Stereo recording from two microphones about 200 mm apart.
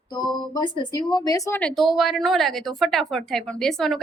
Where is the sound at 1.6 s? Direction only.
Centre (ahead or behind).